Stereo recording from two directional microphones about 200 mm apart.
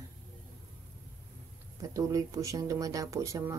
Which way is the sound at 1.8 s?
15° right (ahead or behind).